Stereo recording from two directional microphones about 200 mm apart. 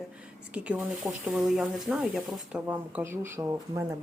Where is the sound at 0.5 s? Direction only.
5° right (ahead or behind).